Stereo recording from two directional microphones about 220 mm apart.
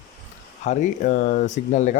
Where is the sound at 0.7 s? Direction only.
35° left (ahead or behind).